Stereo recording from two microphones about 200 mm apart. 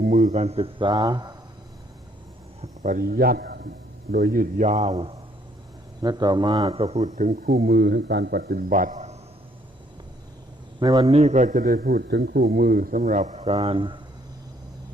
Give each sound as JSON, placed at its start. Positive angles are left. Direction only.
{"t": 0.0, "sound": "speech", "side_deg": -40}
{"t": 2.6, "sound": "a man's voice", "side_deg": -40}
{"t": 6.0, "sound": "speech", "side_deg": -20}
{"t": 6.8, "sound": "a man's voice", "side_deg": -35}
{"t": 10.8, "sound": "a man's voice", "side_deg": -20}
{"t": 11.1, "sound": "a man's voice", "side_deg": -35}